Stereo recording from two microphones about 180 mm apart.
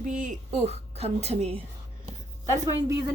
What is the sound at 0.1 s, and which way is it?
Speech, 45° right (ahead or behind).